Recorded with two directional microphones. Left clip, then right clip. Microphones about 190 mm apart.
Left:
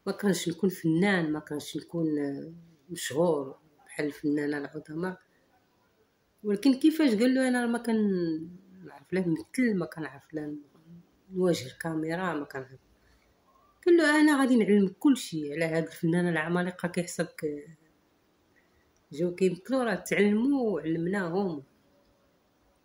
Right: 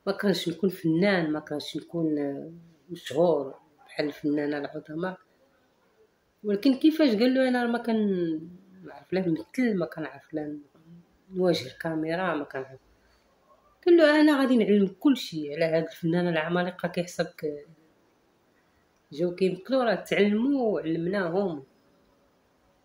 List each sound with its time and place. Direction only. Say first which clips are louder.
0.0 s speech: right 3 dB; 15° left (ahead or behind)
6.4 s speech: right 2 dB; 15° left (ahead or behind)
13.8 s speech: right 3 dB; 15° left (ahead or behind)
19.1 s speech: right 1 dB; 15° left (ahead or behind)